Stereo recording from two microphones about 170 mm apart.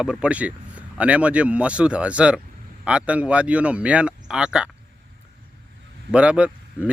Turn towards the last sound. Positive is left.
turn(degrees=-10)  # may be behind; listen again after turning